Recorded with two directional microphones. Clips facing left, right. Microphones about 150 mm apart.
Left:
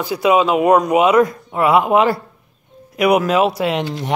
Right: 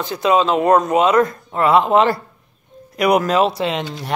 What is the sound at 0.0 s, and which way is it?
Speech, 10° left (ahead or behind).